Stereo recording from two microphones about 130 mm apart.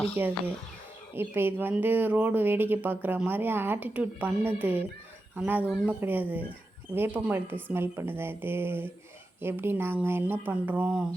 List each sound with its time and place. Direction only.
0.2 s speech: 15° right (ahead or behind)